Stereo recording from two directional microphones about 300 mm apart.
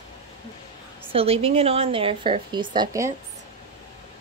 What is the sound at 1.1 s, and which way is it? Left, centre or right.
A woman's voice, centre.